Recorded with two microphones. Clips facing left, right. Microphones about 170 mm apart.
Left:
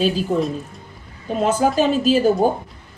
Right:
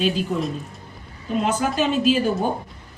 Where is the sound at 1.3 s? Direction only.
40° left (ahead or behind).